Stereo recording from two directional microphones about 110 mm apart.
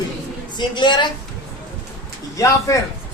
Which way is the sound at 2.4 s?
30° left (ahead or behind).